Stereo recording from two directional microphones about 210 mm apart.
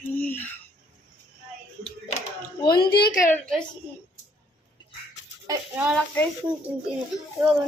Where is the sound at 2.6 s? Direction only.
45° left (ahead or behind).